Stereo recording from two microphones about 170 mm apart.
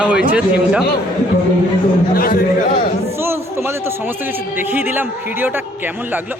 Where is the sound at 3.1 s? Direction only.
15° right (ahead or behind).